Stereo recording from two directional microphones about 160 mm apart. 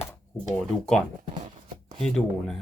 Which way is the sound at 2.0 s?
5° left (ahead or behind).